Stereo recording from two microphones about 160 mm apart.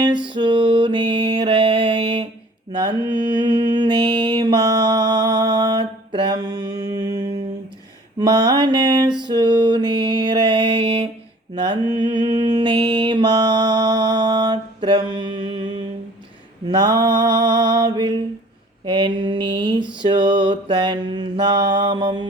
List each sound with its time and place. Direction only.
0.0 s mantra: 30° right (ahead or behind)
9.2 s music: 25° right (ahead or behind)
11.5 s mantra: 30° right (ahead or behind)